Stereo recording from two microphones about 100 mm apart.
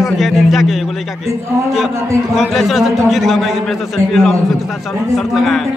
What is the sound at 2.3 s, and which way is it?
A man's voice, centre (ahead or behind).